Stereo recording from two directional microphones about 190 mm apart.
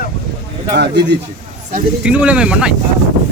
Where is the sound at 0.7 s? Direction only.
60° right (ahead or behind).